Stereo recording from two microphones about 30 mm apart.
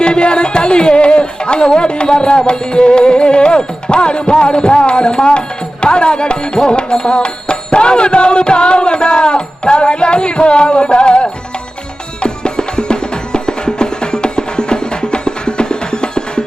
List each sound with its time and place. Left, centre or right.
0.0 s music: left